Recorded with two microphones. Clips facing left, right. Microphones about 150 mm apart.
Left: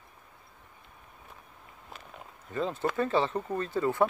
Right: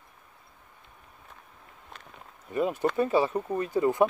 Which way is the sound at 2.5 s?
15° right (ahead or behind).